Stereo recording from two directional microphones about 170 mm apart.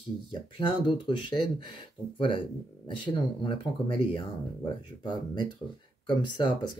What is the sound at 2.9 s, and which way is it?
Speech, 30° left (ahead or behind).